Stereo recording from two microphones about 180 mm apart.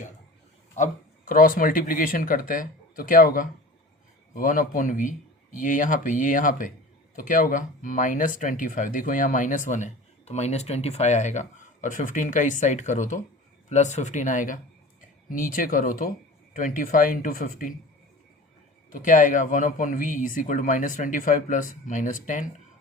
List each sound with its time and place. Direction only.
0.8 s speech: 50° left (ahead or behind)
18.9 s speech: 45° left (ahead or behind)